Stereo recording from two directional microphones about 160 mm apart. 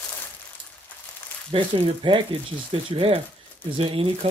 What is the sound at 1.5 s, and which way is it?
Speech, 30° right (ahead or behind).